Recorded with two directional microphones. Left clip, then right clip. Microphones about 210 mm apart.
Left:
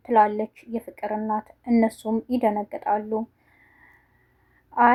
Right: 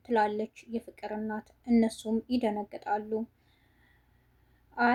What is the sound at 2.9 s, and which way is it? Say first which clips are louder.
Speech: left 7 dB; 30° left (ahead or behind).